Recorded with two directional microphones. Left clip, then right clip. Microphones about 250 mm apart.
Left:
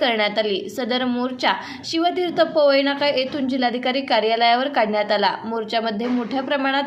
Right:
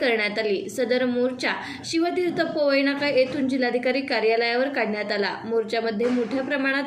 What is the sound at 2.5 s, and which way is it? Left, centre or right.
A woman's voice, left.